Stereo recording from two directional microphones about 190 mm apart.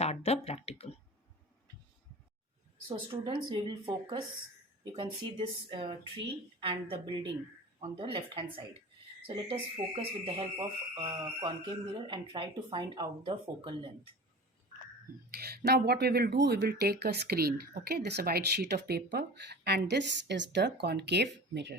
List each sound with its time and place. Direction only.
0.0 s a sound: 35° left (ahead or behind)
2.9 s speech: 25° right (ahead or behind)
15.3 s speech: 55° right (ahead or behind)